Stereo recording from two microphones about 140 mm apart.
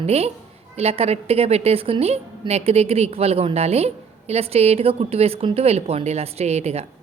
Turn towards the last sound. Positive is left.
turn(degrees=-50)  # may be behind; listen again after turning